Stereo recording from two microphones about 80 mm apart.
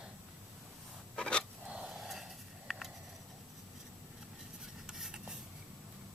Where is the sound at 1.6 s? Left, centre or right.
Centre.